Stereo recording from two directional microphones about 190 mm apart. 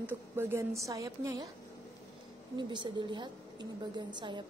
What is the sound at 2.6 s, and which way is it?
A woman's voice, 25° right (ahead or behind).